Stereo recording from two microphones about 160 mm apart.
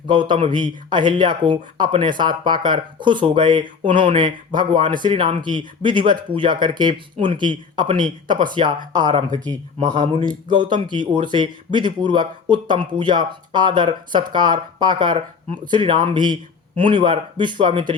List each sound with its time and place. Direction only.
0.1 s speech: 30° right (ahead or behind)